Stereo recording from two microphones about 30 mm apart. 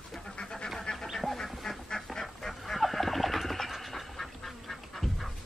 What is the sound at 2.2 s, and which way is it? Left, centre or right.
Bird, centre.